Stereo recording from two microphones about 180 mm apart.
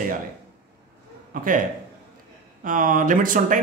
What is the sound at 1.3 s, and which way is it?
A man's voice, 50° right (ahead or behind).